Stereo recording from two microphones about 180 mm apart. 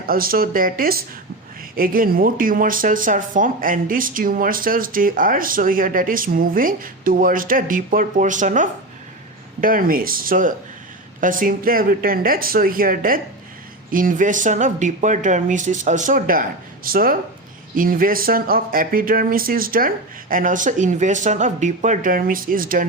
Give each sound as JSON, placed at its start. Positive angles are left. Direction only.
{"t": 0.1, "sound": "speech", "side_deg": -55}